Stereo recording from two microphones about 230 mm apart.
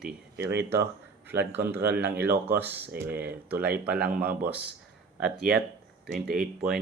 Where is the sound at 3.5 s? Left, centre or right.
Centre.